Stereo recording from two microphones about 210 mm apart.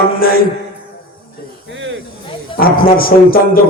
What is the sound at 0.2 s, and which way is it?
Mantra, 45° left (ahead or behind).